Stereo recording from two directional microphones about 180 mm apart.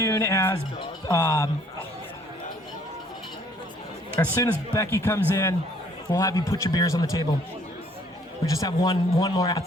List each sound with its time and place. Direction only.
0.0 s speech: 15° left (ahead or behind)
4.2 s a man's voice: 15° left (ahead or behind)
8.4 s a man's voice: 20° left (ahead or behind)